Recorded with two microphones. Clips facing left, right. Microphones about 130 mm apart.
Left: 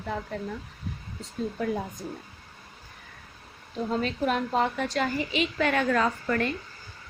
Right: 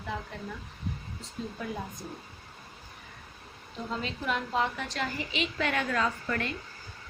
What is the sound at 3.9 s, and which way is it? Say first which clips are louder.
A woman's voice: left 6 dB; 50° left (ahead or behind).